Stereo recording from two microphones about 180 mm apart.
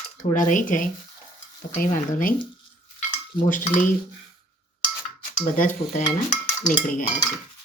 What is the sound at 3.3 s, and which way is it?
Speech, 45° left (ahead or behind).